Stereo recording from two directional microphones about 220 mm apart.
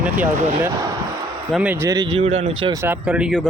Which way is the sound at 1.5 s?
10° right (ahead or behind).